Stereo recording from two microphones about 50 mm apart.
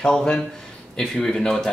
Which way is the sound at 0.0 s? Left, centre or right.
Centre.